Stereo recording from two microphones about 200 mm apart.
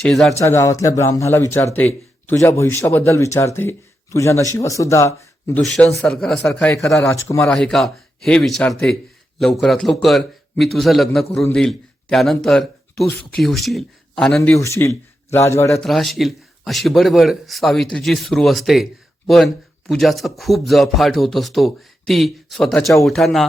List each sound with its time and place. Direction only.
0.0 s speech: centre (ahead or behind)
0.3 s speech: 15° left (ahead or behind)
5.5 s speech: 5° left (ahead or behind)
7.5 s speech: centre (ahead or behind)
14.5 s speech: 15° left (ahead or behind)
15.8 s speech: centre (ahead or behind)
19.9 s speech: centre (ahead or behind)